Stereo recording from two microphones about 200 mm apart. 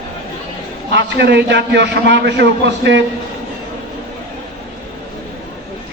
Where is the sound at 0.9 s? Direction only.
60° right (ahead or behind).